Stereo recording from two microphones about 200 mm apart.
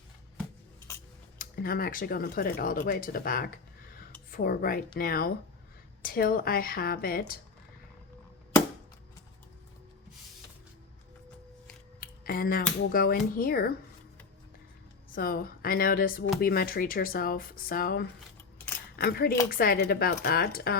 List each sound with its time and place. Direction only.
1.4 s speech: 45° left (ahead or behind)
11.9 s speech: 45° left (ahead or behind)
15.1 s speech: 45° left (ahead or behind)